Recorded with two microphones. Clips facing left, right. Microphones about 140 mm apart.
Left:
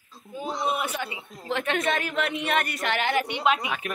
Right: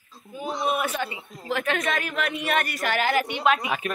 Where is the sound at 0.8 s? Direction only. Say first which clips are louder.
Right 3 dB; 15° left (ahead or behind).